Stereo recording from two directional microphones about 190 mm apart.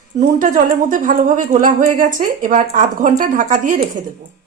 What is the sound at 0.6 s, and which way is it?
A woman's voice, 45° right (ahead or behind).